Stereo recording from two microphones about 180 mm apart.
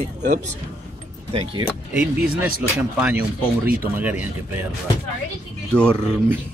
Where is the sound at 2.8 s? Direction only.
5° right (ahead or behind).